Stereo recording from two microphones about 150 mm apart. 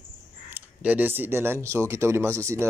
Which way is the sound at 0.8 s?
10° right (ahead or behind).